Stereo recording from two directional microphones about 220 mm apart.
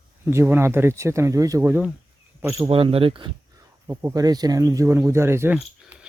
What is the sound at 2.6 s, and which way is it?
Speech, 25° right (ahead or behind).